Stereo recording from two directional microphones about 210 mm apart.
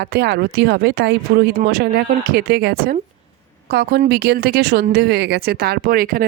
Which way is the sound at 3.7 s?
50° right (ahead or behind).